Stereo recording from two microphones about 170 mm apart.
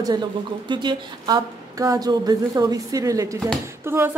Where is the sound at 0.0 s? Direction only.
25° right (ahead or behind).